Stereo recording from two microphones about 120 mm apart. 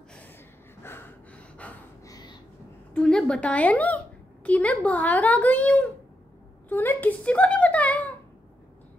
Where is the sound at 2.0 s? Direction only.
30° left (ahead or behind).